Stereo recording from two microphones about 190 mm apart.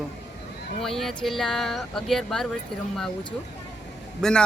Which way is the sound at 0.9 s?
Centre (ahead or behind).